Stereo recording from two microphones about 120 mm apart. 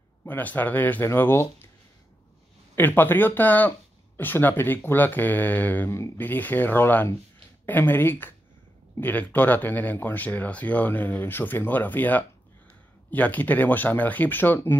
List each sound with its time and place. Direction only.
0.2 s speech: 15° left (ahead or behind)
2.7 s speech: 15° left (ahead or behind)